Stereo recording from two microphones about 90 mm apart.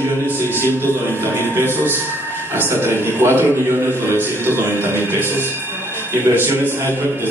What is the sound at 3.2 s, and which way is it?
Speech, 25° right (ahead or behind).